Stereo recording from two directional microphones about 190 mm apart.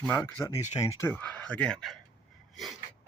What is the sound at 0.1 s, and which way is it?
Speech, 10° left (ahead or behind).